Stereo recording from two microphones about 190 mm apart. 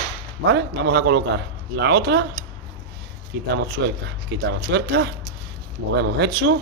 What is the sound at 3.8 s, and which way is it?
Speech, 65° right (ahead or behind).